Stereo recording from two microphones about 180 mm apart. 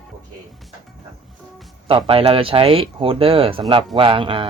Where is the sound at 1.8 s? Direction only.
30° right (ahead or behind).